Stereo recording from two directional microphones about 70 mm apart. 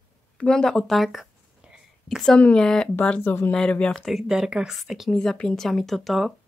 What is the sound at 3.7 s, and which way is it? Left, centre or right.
Speech, centre.